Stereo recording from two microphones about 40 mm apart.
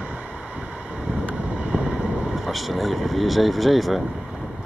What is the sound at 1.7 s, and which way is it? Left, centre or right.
Vehicle, centre.